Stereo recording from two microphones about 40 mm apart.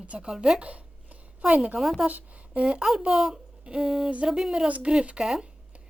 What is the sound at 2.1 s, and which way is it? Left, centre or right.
Speech, right.